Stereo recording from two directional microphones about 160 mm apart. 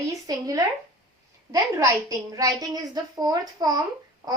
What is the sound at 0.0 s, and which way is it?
A woman's voice, 20° right (ahead or behind).